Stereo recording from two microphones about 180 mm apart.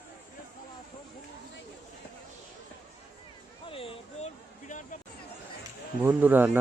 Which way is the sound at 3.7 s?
30° left (ahead or behind).